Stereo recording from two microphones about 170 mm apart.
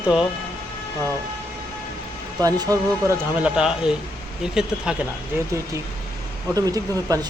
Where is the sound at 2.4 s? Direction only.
20° right (ahead or behind).